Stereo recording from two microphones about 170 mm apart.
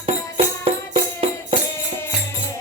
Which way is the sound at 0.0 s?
35° right (ahead or behind).